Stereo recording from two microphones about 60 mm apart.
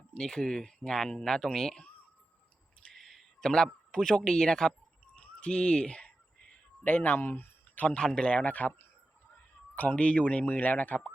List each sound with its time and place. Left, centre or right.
0.1 s speech: centre
2.9 s a sound: centre
3.9 s speech: centre
5.1 s a sound: centre
6.8 s speech: left
7.8 s a man's voice: left